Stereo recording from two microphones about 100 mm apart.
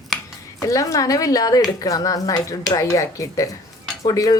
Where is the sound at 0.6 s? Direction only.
30° left (ahead or behind).